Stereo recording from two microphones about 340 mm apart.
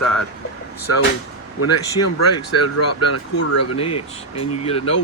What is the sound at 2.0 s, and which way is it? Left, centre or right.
Speech, left.